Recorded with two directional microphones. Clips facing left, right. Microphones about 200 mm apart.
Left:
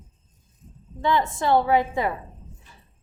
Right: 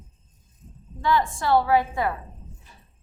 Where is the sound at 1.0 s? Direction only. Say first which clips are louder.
Left 1 dB; 20° left (ahead or behind).